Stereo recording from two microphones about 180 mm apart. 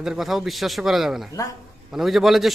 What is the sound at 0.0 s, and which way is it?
A man's voice, centre (ahead or behind).